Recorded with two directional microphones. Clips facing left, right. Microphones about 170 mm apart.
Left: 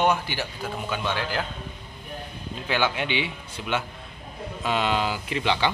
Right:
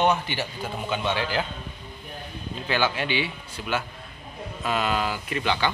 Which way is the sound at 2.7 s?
15° left (ahead or behind).